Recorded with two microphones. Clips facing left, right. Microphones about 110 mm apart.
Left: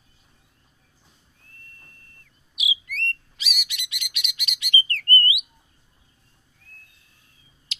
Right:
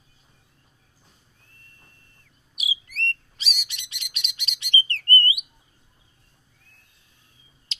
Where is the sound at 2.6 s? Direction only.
35° right (ahead or behind).